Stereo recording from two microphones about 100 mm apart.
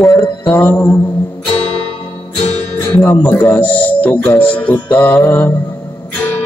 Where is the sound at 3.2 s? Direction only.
15° left (ahead or behind).